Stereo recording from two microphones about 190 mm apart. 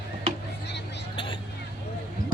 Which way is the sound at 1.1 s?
25° left (ahead or behind).